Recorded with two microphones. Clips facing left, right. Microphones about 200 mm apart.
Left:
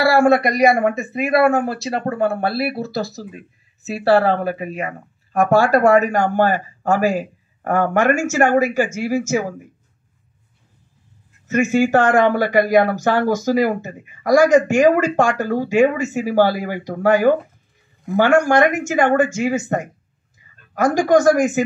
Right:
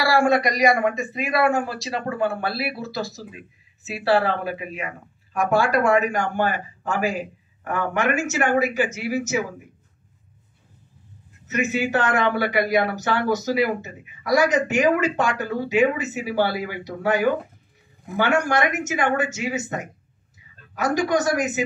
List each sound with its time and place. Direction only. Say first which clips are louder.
0.0 s speech: left 5 dB; 50° left (ahead or behind)
11.4 s speech: left 7 dB; 45° left (ahead or behind)